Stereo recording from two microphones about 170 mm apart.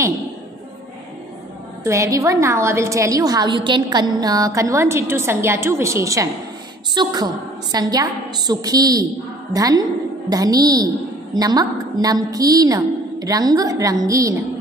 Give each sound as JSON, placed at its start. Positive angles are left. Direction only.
{"t": 1.9, "sound": "a woman's voice", "side_deg": -20}